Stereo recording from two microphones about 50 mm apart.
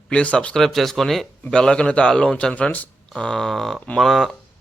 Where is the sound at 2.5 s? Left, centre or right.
Left.